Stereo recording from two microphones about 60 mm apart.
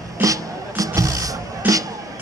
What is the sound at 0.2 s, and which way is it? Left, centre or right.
Music, right.